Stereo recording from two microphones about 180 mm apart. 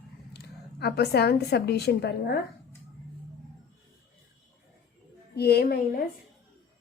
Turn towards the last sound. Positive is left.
turn(degrees=55)  # may be behind; listen again after turning